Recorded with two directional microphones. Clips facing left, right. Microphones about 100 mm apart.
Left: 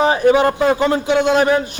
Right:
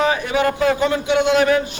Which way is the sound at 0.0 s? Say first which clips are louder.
Left 5 dB; 35° left (ahead or behind).